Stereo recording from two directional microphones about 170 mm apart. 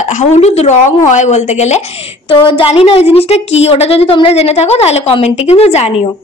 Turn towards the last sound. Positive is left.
turn(degrees=35)  # may be behind; listen again after turning